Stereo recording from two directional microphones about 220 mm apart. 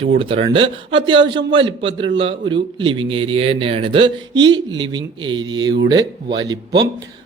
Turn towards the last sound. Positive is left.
turn(degrees=-20)  # may be behind; listen again after turning